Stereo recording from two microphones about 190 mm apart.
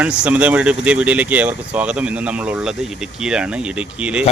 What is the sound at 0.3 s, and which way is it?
Speech, 5° right (ahead or behind).